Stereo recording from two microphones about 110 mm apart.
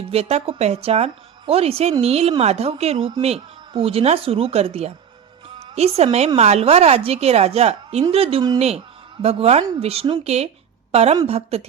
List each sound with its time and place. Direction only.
0.1 s a woman's voice: 70° right (ahead or behind)
8.1 s speech: 60° right (ahead or behind)
8.5 s a woman's voice: 75° right (ahead or behind)